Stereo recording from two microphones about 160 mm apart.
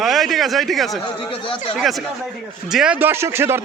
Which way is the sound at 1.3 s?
35° left (ahead or behind).